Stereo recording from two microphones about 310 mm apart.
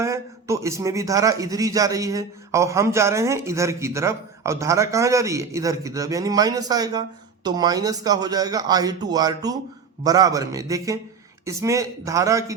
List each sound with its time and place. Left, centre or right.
0.0 s speech: centre